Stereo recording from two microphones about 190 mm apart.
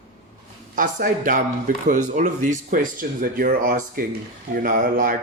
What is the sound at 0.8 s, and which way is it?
Speech, 45° right (ahead or behind).